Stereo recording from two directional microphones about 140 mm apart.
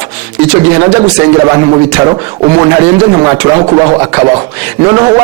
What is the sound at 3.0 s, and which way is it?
Speech, 30° right (ahead or behind).